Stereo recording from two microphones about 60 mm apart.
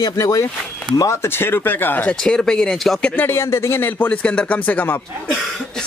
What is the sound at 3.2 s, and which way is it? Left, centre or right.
Speech, left.